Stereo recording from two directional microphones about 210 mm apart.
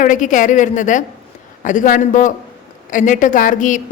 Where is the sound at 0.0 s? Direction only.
35° left (ahead or behind).